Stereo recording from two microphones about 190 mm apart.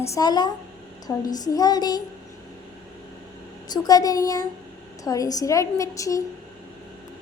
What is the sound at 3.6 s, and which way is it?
A child's voice, 20° left (ahead or behind).